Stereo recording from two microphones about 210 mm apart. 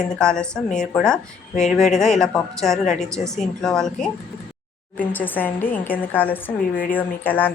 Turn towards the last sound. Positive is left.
turn(degrees=10)  # may be behind; listen again after turning